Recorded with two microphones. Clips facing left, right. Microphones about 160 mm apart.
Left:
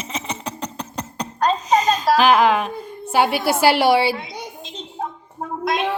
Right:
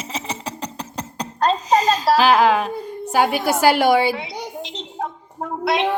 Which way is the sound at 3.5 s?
45° right (ahead or behind).